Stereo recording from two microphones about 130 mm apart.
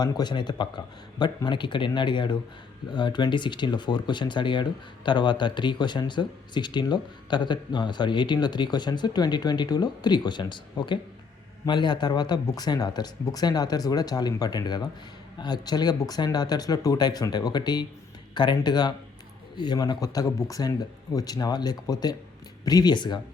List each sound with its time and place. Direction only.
0.0 s speech: 30° left (ahead or behind)